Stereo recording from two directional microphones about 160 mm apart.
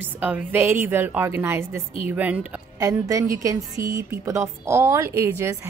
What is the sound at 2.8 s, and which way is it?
A woman's voice, 20° right (ahead or behind).